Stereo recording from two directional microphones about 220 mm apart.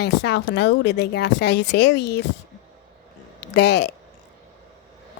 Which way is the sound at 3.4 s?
50° left (ahead or behind).